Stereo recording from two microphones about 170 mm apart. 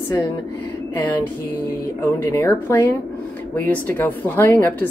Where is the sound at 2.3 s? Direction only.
15° left (ahead or behind).